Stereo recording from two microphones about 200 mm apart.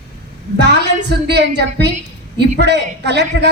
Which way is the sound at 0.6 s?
55° right (ahead or behind).